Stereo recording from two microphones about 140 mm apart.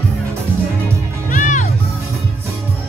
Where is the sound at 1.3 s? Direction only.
65° left (ahead or behind).